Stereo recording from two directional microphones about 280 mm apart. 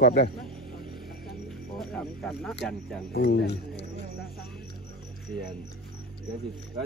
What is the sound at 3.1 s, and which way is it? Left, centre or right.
Speech, left.